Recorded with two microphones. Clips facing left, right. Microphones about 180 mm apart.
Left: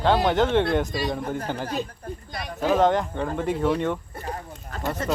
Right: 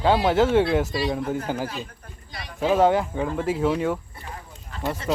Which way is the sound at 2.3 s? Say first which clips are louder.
Left 2 dB; 50° left (ahead or behind).